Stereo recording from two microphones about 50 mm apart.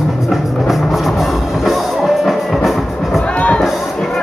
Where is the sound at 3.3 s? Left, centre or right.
Left.